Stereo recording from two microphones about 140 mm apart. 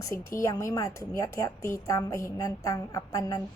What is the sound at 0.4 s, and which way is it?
A woman's voice, 25° left (ahead or behind).